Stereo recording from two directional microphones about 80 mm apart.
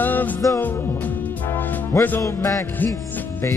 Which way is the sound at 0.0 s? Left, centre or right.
Left.